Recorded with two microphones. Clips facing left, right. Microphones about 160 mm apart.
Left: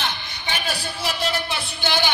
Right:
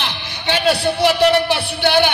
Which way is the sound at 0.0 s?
75° right (ahead or behind).